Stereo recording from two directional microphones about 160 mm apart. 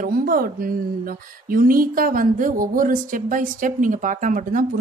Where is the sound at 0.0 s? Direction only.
65° right (ahead or behind).